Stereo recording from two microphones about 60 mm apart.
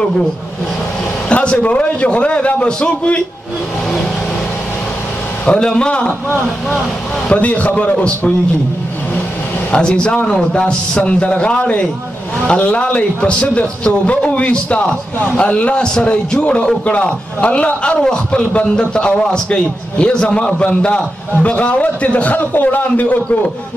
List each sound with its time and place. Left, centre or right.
1.3 s a man's voice: left
5.4 s a man's voice: centre
7.2 s a man's voice: left
9.7 s a man's voice: centre